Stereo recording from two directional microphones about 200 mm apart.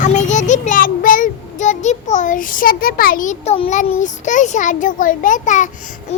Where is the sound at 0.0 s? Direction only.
35° left (ahead or behind).